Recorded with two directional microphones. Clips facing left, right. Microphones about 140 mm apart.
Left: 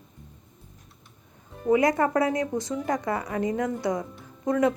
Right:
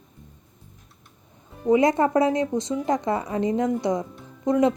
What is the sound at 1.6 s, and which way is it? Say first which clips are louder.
Speech: right 3 dB; 25° right (ahead or behind).